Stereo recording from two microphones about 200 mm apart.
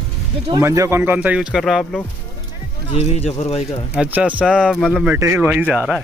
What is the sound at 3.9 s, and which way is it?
Speech, 5° right (ahead or behind).